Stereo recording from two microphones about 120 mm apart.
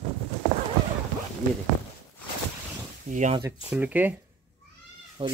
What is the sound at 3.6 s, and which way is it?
Speech, 10° right (ahead or behind).